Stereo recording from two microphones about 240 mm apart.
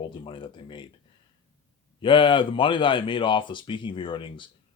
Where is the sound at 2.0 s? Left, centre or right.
Left.